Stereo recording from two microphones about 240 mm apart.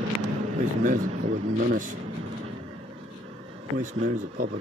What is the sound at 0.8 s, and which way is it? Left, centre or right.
Speech, right.